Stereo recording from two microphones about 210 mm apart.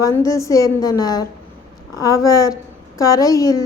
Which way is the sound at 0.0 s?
15° left (ahead or behind).